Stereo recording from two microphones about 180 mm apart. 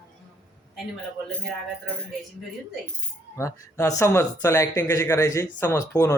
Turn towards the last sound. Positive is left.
turn(degrees=15)  # may be behind; listen again after turning